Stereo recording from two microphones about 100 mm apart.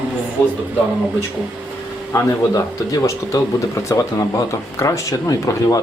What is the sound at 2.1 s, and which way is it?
Speech, 35° left (ahead or behind).